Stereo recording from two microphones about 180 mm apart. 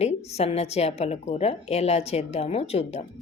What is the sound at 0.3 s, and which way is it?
Speech, 35° left (ahead or behind).